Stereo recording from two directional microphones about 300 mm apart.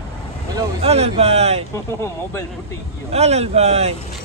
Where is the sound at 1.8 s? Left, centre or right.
Centre.